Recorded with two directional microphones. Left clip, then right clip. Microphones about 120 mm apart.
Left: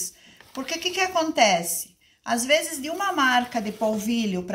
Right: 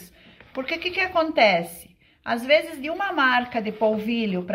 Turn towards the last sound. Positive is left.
turn(degrees=-15)  # may be behind; listen again after turning